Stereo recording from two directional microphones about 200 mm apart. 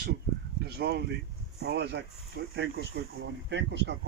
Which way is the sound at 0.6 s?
55° right (ahead or behind).